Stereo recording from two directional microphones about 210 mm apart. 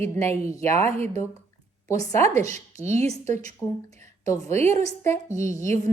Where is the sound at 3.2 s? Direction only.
35° right (ahead or behind).